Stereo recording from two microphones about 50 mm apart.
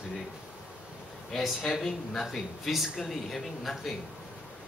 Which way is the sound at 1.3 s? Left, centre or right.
Centre.